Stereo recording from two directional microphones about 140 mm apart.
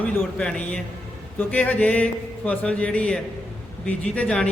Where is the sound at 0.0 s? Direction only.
10° left (ahead or behind).